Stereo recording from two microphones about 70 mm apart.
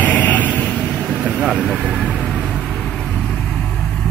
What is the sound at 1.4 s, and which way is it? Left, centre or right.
Vehicle, centre.